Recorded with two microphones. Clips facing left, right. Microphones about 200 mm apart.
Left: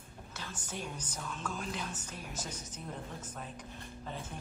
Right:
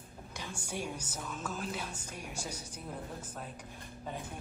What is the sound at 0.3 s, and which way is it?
A woman's voice, 10° right (ahead or behind).